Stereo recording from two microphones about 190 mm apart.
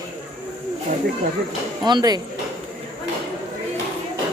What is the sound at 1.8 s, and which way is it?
Speech, 20° right (ahead or behind).